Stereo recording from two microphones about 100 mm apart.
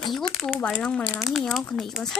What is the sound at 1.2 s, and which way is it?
Speech, centre (ahead or behind).